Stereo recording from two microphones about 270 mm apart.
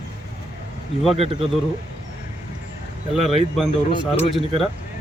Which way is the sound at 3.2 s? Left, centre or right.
Right.